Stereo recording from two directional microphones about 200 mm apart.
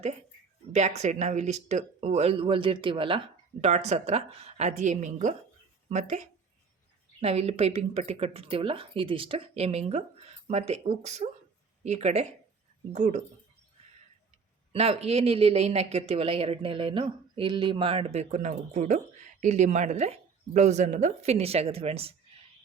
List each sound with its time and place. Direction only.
0.7 s speech: 35° right (ahead or behind)
14.7 s speech: 30° right (ahead or behind)